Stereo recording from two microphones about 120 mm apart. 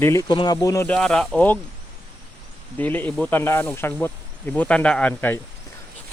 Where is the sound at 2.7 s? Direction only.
15° left (ahead or behind).